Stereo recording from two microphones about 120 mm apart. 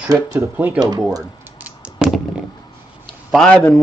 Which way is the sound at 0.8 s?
35° right (ahead or behind).